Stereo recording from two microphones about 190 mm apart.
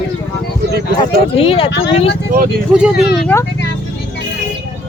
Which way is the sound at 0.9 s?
30° left (ahead or behind).